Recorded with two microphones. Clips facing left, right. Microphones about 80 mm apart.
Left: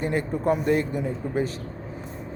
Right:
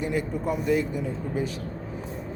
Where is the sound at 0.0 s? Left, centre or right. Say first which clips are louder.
Left 3 dB; left.